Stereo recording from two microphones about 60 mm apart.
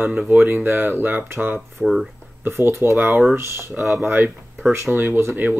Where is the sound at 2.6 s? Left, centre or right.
Right.